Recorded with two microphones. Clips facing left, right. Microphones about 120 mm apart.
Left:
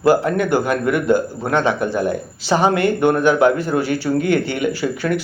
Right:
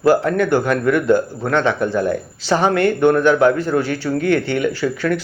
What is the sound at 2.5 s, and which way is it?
Speech, 20° left (ahead or behind).